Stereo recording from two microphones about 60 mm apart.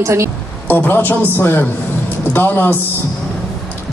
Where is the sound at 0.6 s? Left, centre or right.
Left.